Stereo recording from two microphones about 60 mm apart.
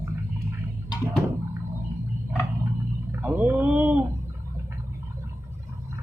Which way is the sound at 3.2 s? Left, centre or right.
Right.